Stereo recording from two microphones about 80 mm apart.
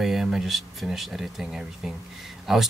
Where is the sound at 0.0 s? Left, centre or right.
Centre.